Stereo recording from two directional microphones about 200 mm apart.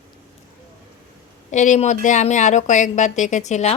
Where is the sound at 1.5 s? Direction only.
35° left (ahead or behind).